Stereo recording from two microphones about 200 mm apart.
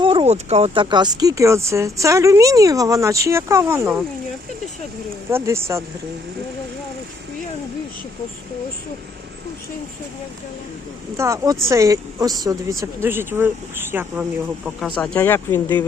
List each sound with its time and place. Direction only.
0.0 s speech: 25° right (ahead or behind)
5.3 s speech: 15° right (ahead or behind)
11.2 s speech: 15° right (ahead or behind)
14.9 s speech: 5° left (ahead or behind)